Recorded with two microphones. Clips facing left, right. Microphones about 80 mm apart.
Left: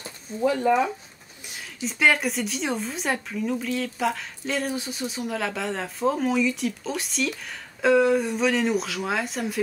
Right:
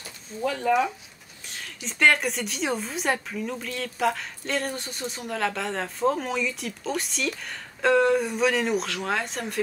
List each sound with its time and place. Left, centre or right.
0.4 s speech: centre